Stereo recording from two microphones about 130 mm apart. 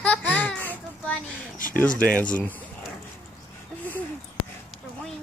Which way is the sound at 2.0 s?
10° left (ahead or behind).